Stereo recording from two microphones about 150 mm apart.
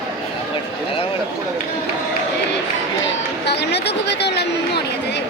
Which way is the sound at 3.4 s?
90° left.